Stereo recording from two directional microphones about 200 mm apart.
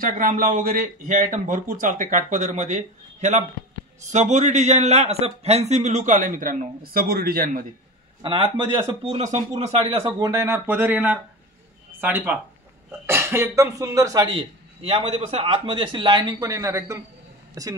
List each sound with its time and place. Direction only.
0.0 s a man's voice: 45° right (ahead or behind)
8.2 s a man's voice: 25° right (ahead or behind)